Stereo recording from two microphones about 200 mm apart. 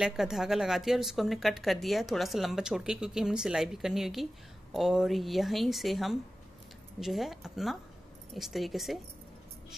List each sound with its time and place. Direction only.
0.0 s speech: centre (ahead or behind)